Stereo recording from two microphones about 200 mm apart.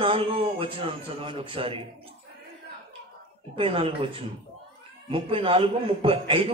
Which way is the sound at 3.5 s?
25° right (ahead or behind).